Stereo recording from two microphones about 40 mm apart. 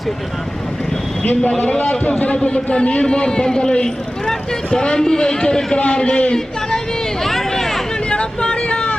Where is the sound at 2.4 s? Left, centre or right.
Left.